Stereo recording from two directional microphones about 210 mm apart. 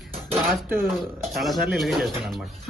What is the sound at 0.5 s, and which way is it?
Speech, centre (ahead or behind).